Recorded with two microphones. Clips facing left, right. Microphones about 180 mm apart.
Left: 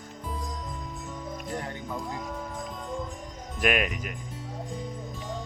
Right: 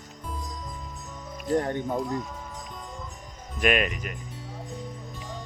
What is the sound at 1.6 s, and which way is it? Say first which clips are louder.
Speech: right 8 dB; 50° right (ahead or behind).